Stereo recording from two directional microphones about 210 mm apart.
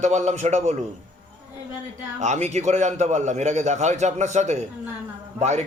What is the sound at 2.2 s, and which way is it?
A man's voice, 35° right (ahead or behind).